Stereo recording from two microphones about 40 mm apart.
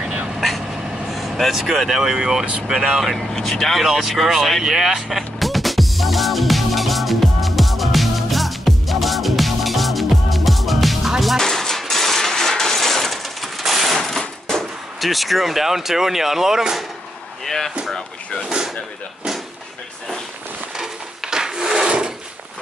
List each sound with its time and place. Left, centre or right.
0.0 s vehicle: right
1.1 s speech: centre
3.0 s speech: centre
3.3 s speech: centre
3.8 s vehicle: centre
11.3 s coin: centre
17.5 s chop: centre
20.7 s wood: centre